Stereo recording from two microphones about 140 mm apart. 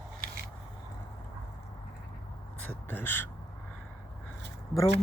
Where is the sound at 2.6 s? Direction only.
10° left (ahead or behind).